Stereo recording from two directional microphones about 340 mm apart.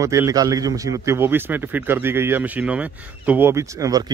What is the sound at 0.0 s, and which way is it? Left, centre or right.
A man's voice, centre.